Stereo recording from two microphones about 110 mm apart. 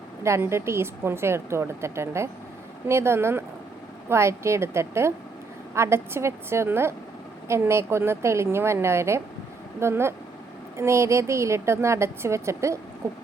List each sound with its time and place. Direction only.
0.2 s a woman's voice: 25° right (ahead or behind)